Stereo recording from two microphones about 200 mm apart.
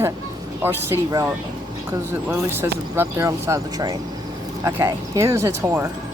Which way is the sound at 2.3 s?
10° right (ahead or behind).